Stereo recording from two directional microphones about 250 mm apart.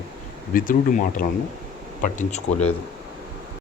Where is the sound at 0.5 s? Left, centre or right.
Left.